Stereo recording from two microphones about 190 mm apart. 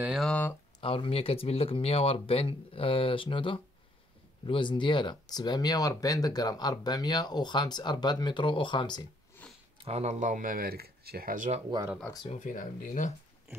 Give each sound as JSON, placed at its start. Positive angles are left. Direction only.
{"t": 0.0, "sound": "speech", "side_deg": 0}
{"t": 0.7, "sound": "speech", "side_deg": 25}
{"t": 9.8, "sound": "speech", "side_deg": -30}
{"t": 12.0, "sound": "speech", "side_deg": 20}
{"t": 12.3, "sound": "speech", "side_deg": 40}